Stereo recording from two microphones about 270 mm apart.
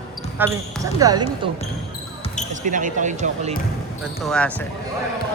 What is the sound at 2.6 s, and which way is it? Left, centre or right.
Speech, right.